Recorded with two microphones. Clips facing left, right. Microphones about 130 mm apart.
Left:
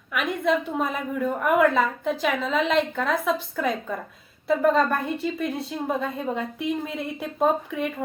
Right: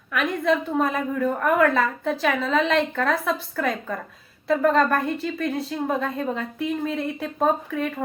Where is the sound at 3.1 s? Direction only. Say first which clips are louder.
Even; 20° left (ahead or behind).